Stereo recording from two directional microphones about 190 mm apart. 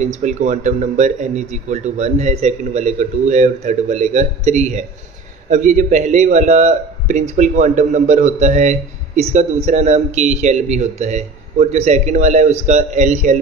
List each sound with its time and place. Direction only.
0.0 s speech: 40° right (ahead or behind)